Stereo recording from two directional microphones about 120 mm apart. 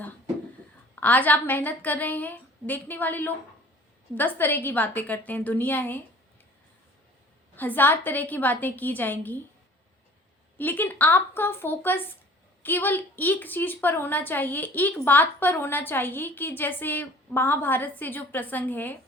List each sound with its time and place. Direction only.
0.9 s a woman's voice: 15° left (ahead or behind)
7.5 s a woman's voice: 15° left (ahead or behind)
10.6 s a woman's voice: 15° left (ahead or behind)